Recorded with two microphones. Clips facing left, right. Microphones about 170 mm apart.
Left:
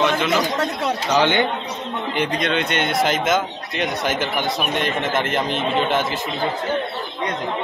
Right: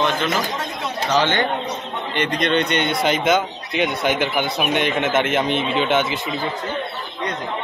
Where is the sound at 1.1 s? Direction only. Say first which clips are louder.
Left 1 dB; 15° left (ahead or behind).